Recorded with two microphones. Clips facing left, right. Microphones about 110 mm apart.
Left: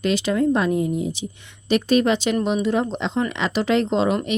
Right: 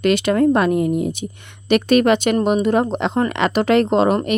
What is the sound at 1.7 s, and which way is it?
Speech, 65° right (ahead or behind).